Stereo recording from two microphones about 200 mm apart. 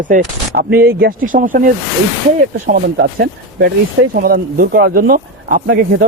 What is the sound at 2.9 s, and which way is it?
Speech, 55° right (ahead or behind).